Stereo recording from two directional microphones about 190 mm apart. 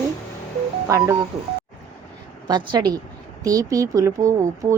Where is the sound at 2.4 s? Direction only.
20° right (ahead or behind).